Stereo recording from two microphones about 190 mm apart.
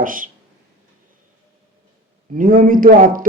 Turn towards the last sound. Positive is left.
turn(degrees=-45)  # may be behind; listen again after turning